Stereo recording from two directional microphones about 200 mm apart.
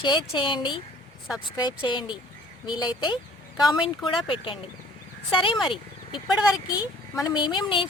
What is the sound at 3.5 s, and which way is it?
Speech, centre (ahead or behind).